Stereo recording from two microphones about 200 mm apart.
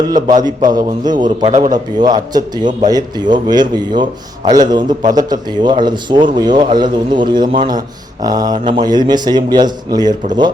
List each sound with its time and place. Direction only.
0.1 s speech: 20° right (ahead or behind)